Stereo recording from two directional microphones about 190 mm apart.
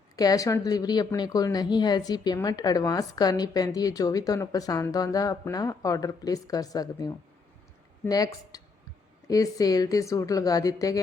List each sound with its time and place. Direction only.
0.2 s speech: 20° left (ahead or behind)